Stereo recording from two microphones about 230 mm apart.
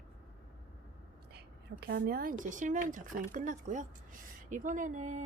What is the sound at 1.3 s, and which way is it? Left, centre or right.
A woman's voice, right.